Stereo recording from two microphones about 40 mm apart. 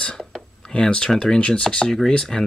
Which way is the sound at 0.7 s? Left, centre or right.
Left.